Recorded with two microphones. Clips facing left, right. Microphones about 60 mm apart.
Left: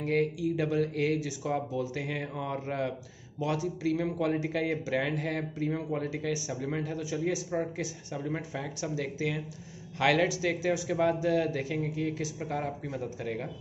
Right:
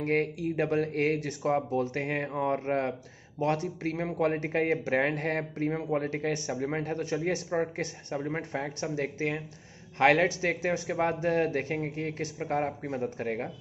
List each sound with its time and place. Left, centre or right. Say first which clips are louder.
0.0 s speech: even; right
8.6 s speech: right 2 dB; right